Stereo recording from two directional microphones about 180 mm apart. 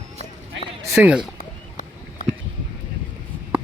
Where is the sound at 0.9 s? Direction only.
5° right (ahead or behind).